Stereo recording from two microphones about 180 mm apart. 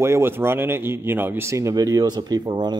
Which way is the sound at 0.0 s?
15° right (ahead or behind).